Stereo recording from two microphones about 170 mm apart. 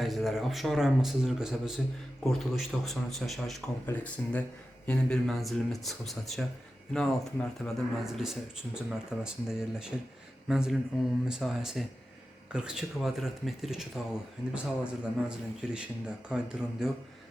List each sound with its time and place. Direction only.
0.0 s speech: centre (ahead or behind)